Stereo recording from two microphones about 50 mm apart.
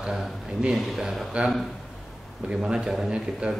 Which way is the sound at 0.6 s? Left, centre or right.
Centre.